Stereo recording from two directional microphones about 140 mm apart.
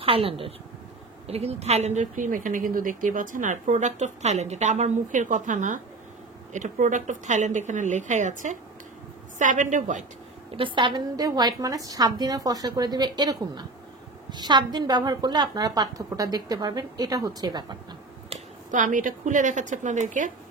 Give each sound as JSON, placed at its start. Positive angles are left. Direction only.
{"t": 0.0, "sound": "a woman's voice", "side_deg": -40}
{"t": 10.5, "sound": "a woman's voice", "side_deg": -35}
{"t": 18.7, "sound": "a woman's voice", "side_deg": -65}